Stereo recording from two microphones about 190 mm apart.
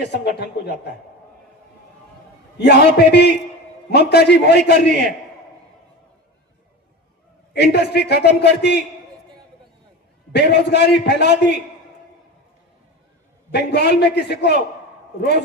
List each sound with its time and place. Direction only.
0.1 s a man's voice: 60° left (ahead or behind)
2.6 s a man's voice: 60° left (ahead or behind)
7.5 s a man's voice: 60° left (ahead or behind)
10.3 s a man's voice: 60° left (ahead or behind)
13.5 s a man's voice: 60° left (ahead or behind)